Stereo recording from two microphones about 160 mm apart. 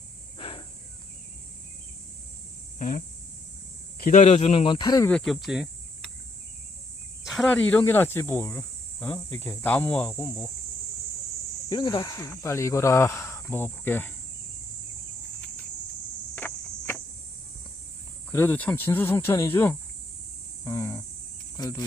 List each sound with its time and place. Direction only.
0.3 s insect: 35° left (ahead or behind)
2.7 s a sound: 55° left (ahead or behind)
4.0 s speech: 50° left (ahead or behind); by 5.0 s 25° left (ahead or behind)
5.0 s speech: 5° left (ahead or behind)
7.3 s cricket: centre (ahead or behind)
7.5 s speech: 10° left (ahead or behind)
11.7 s speech: 25° left (ahead or behind)
16.3 s insect: 10° left (ahead or behind)
18.3 s speech: 15° left (ahead or behind)
20.7 s cricket: 20° left (ahead or behind)
21.5 s speech: 25° left (ahead or behind)